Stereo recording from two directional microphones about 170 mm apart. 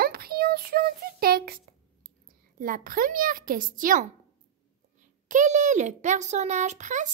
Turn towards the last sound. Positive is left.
turn(degrees=-45)  # may be behind; listen again after turning